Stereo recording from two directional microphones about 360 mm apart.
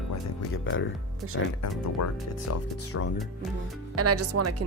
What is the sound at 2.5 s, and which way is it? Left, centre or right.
Speech, left.